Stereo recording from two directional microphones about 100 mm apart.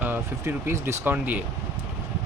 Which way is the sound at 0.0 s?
25° right (ahead or behind).